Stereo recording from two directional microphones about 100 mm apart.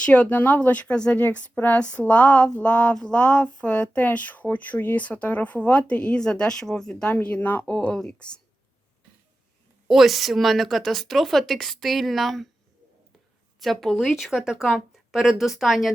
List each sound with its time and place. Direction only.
0.0 s speech: 15° left (ahead or behind)
9.9 s a woman's voice: centre (ahead or behind)
13.6 s a woman's voice: centre (ahead or behind)